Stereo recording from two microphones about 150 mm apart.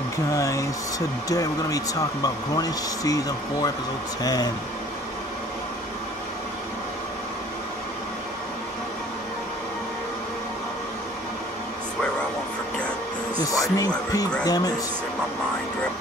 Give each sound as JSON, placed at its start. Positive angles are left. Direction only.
{"t": 0.3, "sound": "speech", "side_deg": 20}
{"t": 13.5, "sound": "speech", "side_deg": 25}